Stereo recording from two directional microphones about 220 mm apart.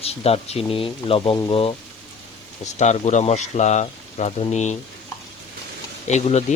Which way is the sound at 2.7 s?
30° left (ahead or behind).